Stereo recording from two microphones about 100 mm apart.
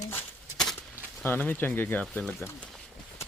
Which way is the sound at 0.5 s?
5° left (ahead or behind).